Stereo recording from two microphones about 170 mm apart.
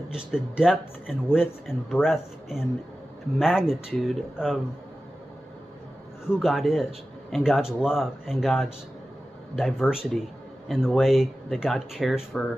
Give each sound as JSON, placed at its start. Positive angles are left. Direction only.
{"t": 0.1, "sound": "speech", "side_deg": -5}
{"t": 6.2, "sound": "speech", "side_deg": 0}